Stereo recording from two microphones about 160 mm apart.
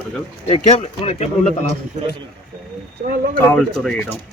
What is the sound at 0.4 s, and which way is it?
Speech, 40° left (ahead or behind).